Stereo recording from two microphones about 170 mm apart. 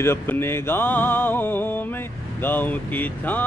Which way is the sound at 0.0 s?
15° left (ahead or behind).